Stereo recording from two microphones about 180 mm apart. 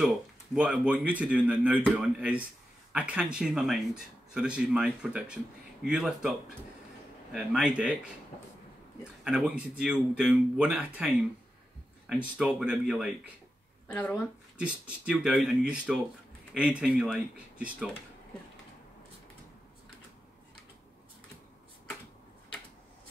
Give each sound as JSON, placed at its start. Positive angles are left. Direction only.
{"t": 0.6, "sound": "speech", "side_deg": -5}
{"t": 7.3, "sound": "speech", "side_deg": -5}
{"t": 9.0, "sound": "speech", "side_deg": -5}
{"t": 12.1, "sound": "speech", "side_deg": -5}
{"t": 13.8, "sound": "speech", "side_deg": 10}
{"t": 14.6, "sound": "speech", "side_deg": -5}